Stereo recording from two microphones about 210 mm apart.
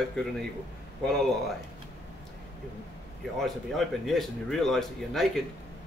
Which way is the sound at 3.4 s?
Centre (ahead or behind).